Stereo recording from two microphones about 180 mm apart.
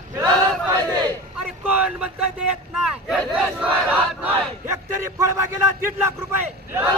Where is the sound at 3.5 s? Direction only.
10° right (ahead or behind).